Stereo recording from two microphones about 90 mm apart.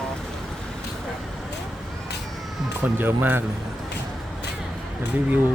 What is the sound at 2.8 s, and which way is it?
Speech, 25° right (ahead or behind).